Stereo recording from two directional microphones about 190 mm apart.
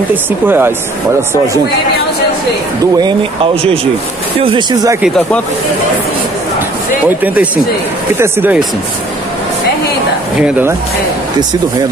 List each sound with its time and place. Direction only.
0.1 s speech: 10° right (ahead or behind)
4.4 s speech: 25° right (ahead or behind)
5.0 s speech: 5° left (ahead or behind)
7.1 s speech: 10° right (ahead or behind)